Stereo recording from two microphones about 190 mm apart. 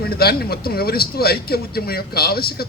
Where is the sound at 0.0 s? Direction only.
55° left (ahead or behind).